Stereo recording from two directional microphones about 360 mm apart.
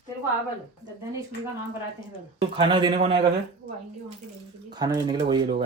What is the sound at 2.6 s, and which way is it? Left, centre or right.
Speech, centre.